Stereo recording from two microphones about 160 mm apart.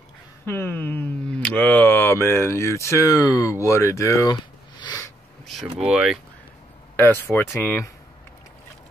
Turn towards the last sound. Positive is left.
turn(degrees=15)  # may be behind; listen again after turning